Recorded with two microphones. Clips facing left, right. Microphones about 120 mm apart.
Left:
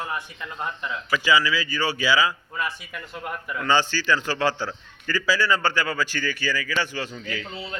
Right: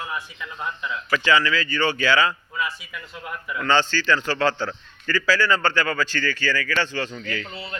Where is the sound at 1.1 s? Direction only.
10° left (ahead or behind).